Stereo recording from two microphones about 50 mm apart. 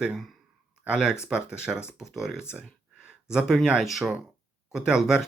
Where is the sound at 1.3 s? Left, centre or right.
Centre.